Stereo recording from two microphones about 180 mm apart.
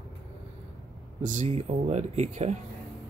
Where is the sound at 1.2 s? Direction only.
40° right (ahead or behind).